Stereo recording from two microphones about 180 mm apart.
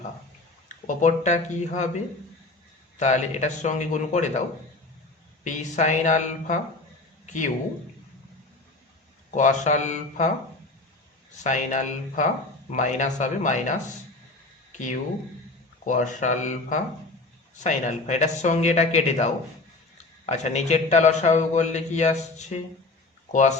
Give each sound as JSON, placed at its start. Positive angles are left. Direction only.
{"t": 0.9, "sound": "a man's voice", "side_deg": 40}
{"t": 3.0, "sound": "a man's voice", "side_deg": 40}
{"t": 9.3, "sound": "a man's voice", "side_deg": 45}
{"t": 11.4, "sound": "speech", "side_deg": 45}
{"t": 14.7, "sound": "a sound", "side_deg": 45}
{"t": 15.9, "sound": "a man's voice", "side_deg": 45}